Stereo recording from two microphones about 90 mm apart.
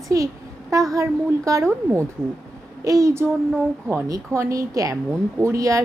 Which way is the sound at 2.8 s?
40° right (ahead or behind).